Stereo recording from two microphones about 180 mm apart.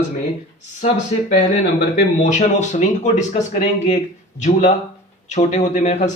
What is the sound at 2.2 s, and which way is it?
A man's voice, 40° left (ahead or behind).